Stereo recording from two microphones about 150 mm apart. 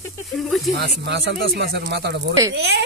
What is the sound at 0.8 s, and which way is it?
Speech, 90° right.